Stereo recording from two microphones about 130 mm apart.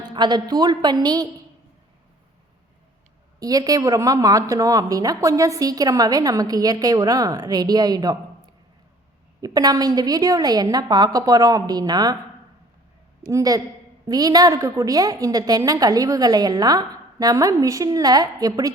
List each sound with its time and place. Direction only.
0.0 s a woman's voice: 35° right (ahead or behind)
3.4 s speech: 30° right (ahead or behind)
9.4 s speech: 30° right (ahead or behind)
13.2 s speech: 25° right (ahead or behind)